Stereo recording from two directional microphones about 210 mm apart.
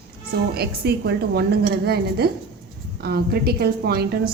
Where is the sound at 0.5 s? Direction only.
50° right (ahead or behind).